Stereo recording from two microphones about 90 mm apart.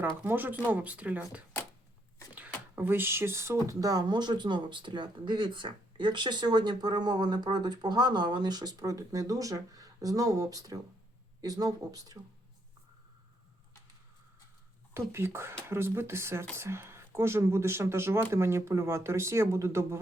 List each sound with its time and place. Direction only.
0.3 s speech: 20° right (ahead or behind)
2.7 s speech: 25° right (ahead or behind); by 12.1 s 40° right (ahead or behind)
15.1 s speech: 30° right (ahead or behind)